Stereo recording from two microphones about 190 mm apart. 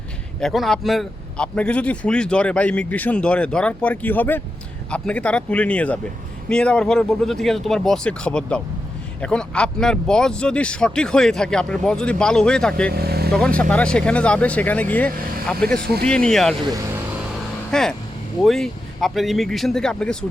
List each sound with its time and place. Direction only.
0.3 s a man's voice: centre (ahead or behind)
12.9 s speech: 55° right (ahead or behind)
13.3 s a man's voice: 5° left (ahead or behind)
15.8 s speech: 55° right (ahead or behind)
16.0 s speech: 5° left (ahead or behind)
17.7 s speech: 5° left (ahead or behind)